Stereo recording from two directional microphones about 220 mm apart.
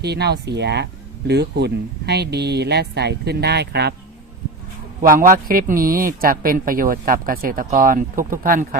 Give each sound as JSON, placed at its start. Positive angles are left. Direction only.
{"t": 0.0, "sound": "speech", "side_deg": -50}
{"t": 5.0, "sound": "speech", "side_deg": -40}